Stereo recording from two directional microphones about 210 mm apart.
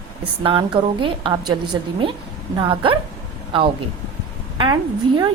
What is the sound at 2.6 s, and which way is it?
Speech, 25° right (ahead or behind).